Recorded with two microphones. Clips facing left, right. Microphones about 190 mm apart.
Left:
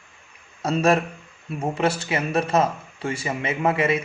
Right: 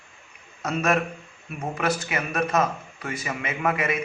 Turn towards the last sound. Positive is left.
turn(degrees=30)  # may be behind; listen again after turning